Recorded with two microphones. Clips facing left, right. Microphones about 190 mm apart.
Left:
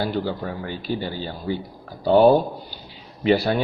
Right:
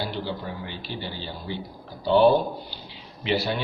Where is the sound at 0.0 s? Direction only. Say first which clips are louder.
Left 6 dB; 45° left (ahead or behind).